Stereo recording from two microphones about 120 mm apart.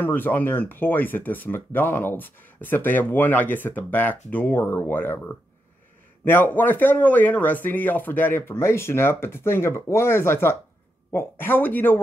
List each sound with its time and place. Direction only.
0.0 s speech: 15° left (ahead or behind)
6.2 s speech: 15° left (ahead or behind)